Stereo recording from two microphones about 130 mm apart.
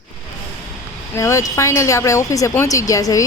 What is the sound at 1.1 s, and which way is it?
Speech, 20° left (ahead or behind).